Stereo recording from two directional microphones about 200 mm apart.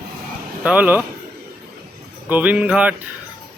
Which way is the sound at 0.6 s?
5° right (ahead or behind).